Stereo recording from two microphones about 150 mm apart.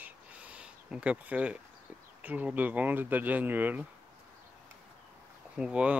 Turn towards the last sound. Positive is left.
turn(degrees=-5)  # may be behind; listen again after turning